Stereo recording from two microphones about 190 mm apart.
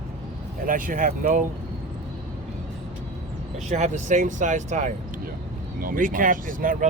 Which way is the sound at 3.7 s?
40° right (ahead or behind).